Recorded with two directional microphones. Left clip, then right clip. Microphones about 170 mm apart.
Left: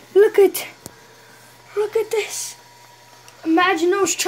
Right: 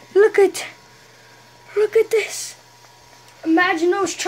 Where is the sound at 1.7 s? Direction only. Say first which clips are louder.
Right 4 dB; 45° right (ahead or behind).